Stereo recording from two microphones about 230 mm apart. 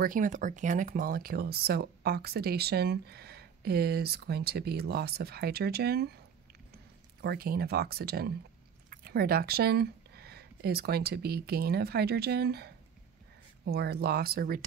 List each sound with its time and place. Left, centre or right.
0.0 s speech: right
7.2 s speech: right